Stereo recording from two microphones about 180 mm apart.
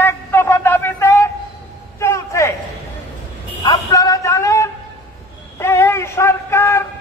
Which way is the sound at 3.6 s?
20° left (ahead or behind).